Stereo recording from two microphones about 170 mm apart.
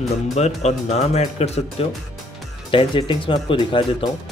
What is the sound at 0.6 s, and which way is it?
Speech, 40° left (ahead or behind).